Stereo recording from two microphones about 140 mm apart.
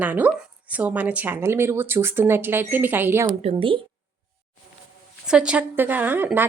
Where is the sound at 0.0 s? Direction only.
10° right (ahead or behind).